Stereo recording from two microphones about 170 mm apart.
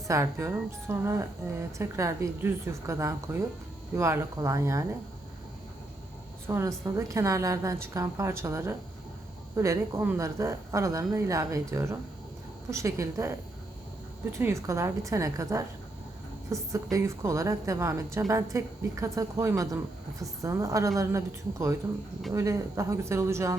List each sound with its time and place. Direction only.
0.1 s a woman's voice: 15° right (ahead or behind)
6.5 s a woman's voice: 15° right (ahead or behind)
14.3 s a woman's voice: 15° right (ahead or behind)